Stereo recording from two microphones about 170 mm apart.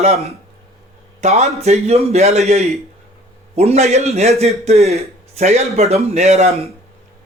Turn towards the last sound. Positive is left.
turn(degrees=-40)  # may be behind; listen again after turning